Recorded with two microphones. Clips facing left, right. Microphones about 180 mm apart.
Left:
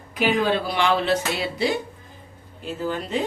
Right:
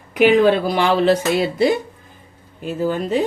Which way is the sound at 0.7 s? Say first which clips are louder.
Right 6 dB; 45° right (ahead or behind).